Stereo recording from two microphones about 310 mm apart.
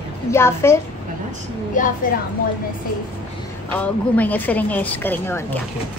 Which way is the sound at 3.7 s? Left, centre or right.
Centre.